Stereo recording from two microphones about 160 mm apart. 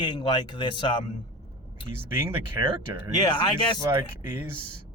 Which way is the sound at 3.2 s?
30° left (ahead or behind).